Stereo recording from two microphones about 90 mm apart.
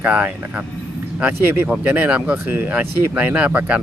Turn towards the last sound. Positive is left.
turn(degrees=-15)  # may be behind; listen again after turning